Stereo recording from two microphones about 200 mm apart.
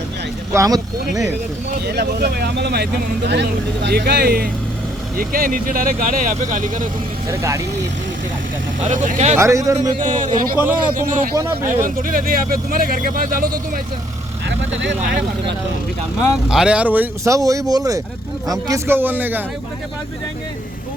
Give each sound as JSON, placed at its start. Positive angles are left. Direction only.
{"t": 0.5, "sound": "speech", "side_deg": -15}
{"t": 1.8, "sound": "speech", "side_deg": -55}
{"t": 7.3, "sound": "speech", "side_deg": -15}
{"t": 8.9, "sound": "speech", "side_deg": -40}
{"t": 9.4, "sound": "speech", "side_deg": -15}
{"t": 10.0, "sound": "speech", "side_deg": -40}
{"t": 11.3, "sound": "speech", "side_deg": -15}
{"t": 11.7, "sound": "speech", "side_deg": -45}
{"t": 14.4, "sound": "speech", "side_deg": -65}
{"t": 16.5, "sound": "speech", "side_deg": -5}